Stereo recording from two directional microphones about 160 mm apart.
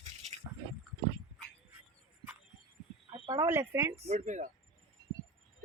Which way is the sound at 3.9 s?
45° right (ahead or behind).